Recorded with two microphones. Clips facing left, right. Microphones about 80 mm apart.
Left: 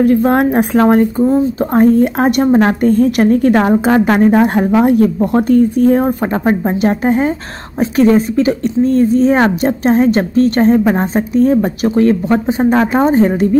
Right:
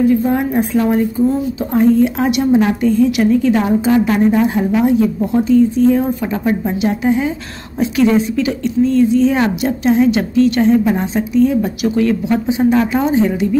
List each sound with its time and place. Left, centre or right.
0.0 s speech: left
1.2 s a woman's voice: left